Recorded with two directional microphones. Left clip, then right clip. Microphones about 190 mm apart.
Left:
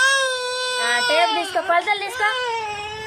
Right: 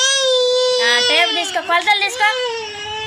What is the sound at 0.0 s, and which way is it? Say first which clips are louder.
Baby cry: right 3 dB; 30° left (ahead or behind).